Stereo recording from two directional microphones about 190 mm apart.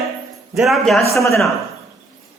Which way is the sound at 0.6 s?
Centre (ahead or behind).